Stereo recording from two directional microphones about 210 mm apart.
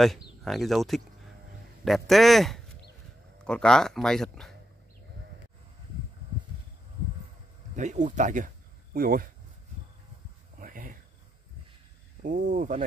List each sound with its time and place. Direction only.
0.4 s speech: centre (ahead or behind)
7.7 s speech: 35° right (ahead or behind)
10.6 s cricket: 40° right (ahead or behind)
12.2 s speech: 40° right (ahead or behind)